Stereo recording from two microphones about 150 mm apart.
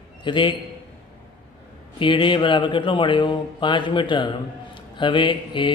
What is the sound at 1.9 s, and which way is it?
Speech, 35° left (ahead or behind).